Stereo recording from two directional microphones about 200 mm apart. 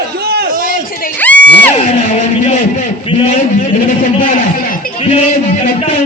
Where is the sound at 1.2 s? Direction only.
5° left (ahead or behind).